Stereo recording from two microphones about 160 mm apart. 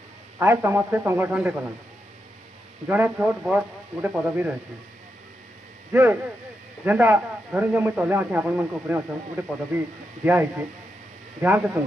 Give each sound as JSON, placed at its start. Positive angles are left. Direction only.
{"t": 0.3, "sound": "a man's voice", "side_deg": -15}
{"t": 2.8, "sound": "a man's voice", "side_deg": -10}
{"t": 5.9, "sound": "a man's voice", "side_deg": -15}